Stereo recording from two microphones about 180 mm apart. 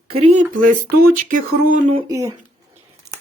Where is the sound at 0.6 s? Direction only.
50° right (ahead or behind).